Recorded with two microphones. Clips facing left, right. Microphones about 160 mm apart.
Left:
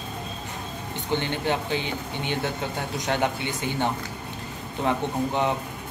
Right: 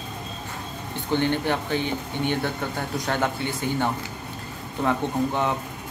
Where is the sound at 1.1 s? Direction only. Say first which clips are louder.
Right 3 dB; 15° left (ahead or behind).